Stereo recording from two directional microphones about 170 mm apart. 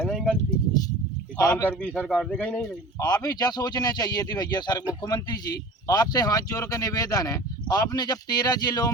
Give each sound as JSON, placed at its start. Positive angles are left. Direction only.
{"t": 0.0, "sound": "a sound", "side_deg": 5}
{"t": 1.4, "sound": "speech", "side_deg": 20}
{"t": 1.8, "sound": "speech", "side_deg": 10}
{"t": 2.6, "sound": "speech", "side_deg": 20}